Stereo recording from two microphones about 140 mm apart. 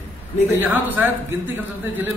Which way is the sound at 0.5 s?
15° right (ahead or behind).